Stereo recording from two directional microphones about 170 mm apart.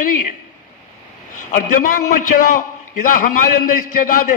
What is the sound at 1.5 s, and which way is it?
A man's voice, 50° left (ahead or behind).